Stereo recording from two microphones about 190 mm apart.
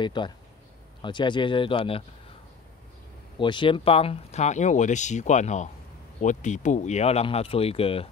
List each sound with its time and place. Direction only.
0.0 s speech: 25° left (ahead or behind)
3.3 s speech: 25° left (ahead or behind)